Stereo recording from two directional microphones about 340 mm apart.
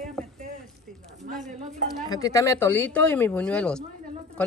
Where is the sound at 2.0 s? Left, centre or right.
Centre.